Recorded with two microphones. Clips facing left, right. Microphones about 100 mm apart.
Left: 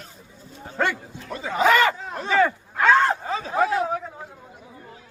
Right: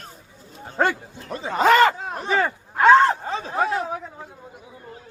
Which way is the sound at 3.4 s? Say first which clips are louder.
Left 2 dB; 30° right (ahead or behind).